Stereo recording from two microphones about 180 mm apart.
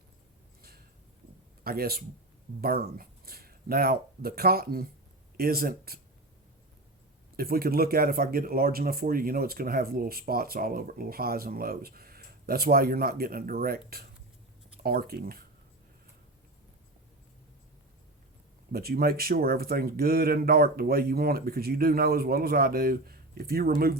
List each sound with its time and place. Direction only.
1.6 s speech: 55° right (ahead or behind)
7.3 s speech: 55° right (ahead or behind)
18.7 s speech: 55° right (ahead or behind)